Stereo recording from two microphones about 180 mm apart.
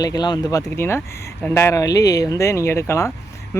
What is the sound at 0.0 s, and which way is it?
Speech, 20° left (ahead or behind).